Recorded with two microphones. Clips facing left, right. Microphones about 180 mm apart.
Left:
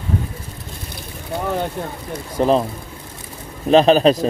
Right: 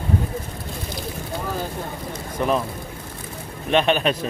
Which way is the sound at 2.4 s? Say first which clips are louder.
Left 6 dB; 30° left (ahead or behind).